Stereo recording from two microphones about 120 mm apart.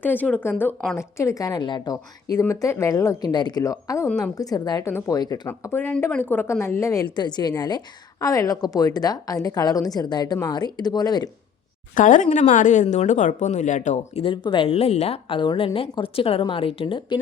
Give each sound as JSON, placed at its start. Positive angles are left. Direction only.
{"t": 0.0, "sound": "a woman's voice", "side_deg": 15}
{"t": 5.5, "sound": "speech", "side_deg": 20}
{"t": 7.2, "sound": "a woman's voice", "side_deg": 35}
{"t": 11.9, "sound": "a woman's voice", "side_deg": 90}
{"t": 14.4, "sound": "a woman's voice", "side_deg": 40}
{"t": 14.7, "sound": "a woman's voice", "side_deg": 60}